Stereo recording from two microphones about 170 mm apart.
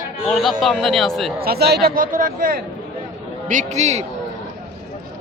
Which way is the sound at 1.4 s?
70° right (ahead or behind).